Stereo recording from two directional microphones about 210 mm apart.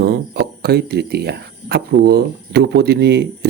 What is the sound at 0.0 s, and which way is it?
Speech, 50° right (ahead or behind).